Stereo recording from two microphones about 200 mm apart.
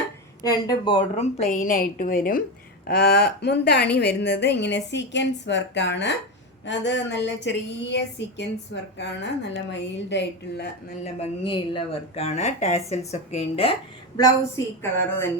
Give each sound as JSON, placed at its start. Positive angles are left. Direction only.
{"t": 0.4, "sound": "a woman's voice", "side_deg": 20}
{"t": 11.0, "sound": "speech", "side_deg": 30}
{"t": 14.2, "sound": "a woman's voice", "side_deg": 15}